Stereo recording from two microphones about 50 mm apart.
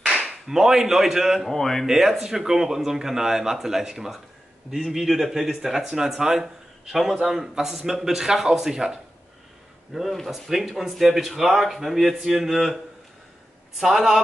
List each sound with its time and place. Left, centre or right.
0.0 s whip: centre
0.5 s speech: centre
1.5 s speech: centre
1.9 s speech: centre
13.7 s speech: centre